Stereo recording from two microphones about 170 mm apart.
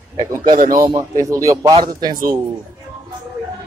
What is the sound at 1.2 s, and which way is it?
Speech, 20° right (ahead or behind).